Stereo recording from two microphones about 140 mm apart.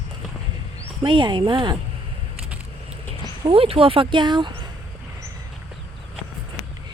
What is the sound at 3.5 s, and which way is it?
Speech, 40° right (ahead or behind).